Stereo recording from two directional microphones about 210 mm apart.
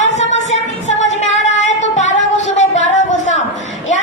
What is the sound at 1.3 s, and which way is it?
Singing, 35° left (ahead or behind).